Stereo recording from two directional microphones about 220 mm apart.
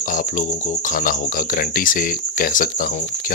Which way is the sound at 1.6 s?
40° left (ahead or behind).